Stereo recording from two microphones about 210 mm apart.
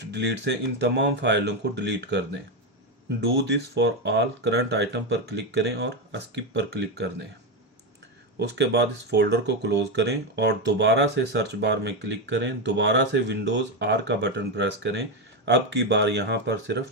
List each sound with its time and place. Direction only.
0.1 s speech: 55° right (ahead or behind)
3.4 s speech: 55° right (ahead or behind)
8.4 s speech: 55° right (ahead or behind)